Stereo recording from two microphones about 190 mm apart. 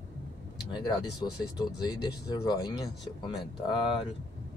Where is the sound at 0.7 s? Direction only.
25° left (ahead or behind).